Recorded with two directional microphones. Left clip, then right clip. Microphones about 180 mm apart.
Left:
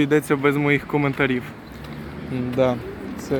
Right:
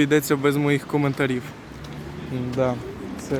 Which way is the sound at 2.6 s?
15° left (ahead or behind).